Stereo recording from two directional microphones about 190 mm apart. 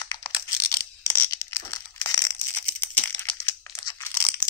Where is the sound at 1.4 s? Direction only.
15° left (ahead or behind).